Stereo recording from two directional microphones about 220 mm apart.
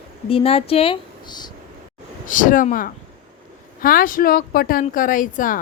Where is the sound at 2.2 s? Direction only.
35° left (ahead or behind).